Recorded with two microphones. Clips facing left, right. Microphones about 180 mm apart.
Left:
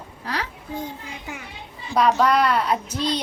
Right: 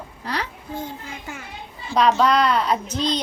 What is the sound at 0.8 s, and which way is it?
A woman's voice, 15° left (ahead or behind).